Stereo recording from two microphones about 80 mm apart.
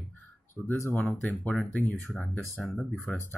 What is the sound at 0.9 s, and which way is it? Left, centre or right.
Speech, left.